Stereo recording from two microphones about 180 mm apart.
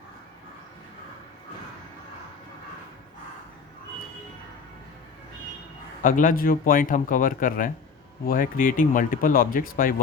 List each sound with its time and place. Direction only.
6.0 s speech: 50° left (ahead or behind)